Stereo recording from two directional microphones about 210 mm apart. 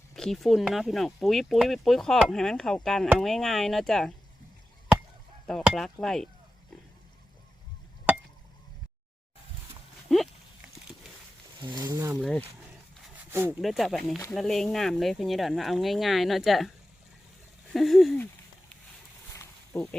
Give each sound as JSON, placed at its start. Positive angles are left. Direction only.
{"t": 0.2, "sound": "speech", "side_deg": 0}
{"t": 5.5, "sound": "speech", "side_deg": 0}
{"t": 11.6, "sound": "speech", "side_deg": -20}
{"t": 12.1, "sound": "speech", "side_deg": 0}
{"t": 13.6, "sound": "speech", "side_deg": 0}
{"t": 17.7, "sound": "speech", "side_deg": 0}
{"t": 19.4, "sound": "snake", "side_deg": 5}